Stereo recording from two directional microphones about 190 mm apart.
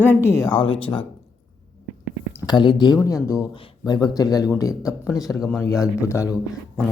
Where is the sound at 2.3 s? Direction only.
20° left (ahead or behind).